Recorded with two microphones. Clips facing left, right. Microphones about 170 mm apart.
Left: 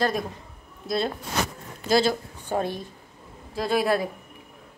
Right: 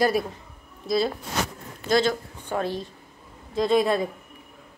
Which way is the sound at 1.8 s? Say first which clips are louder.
Even; 10° left (ahead or behind).